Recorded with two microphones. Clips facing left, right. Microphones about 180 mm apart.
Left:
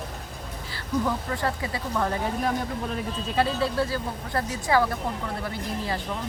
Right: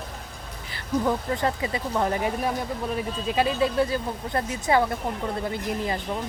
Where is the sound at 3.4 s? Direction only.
15° right (ahead or behind).